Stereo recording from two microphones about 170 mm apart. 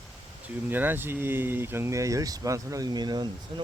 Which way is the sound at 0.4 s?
10° right (ahead or behind).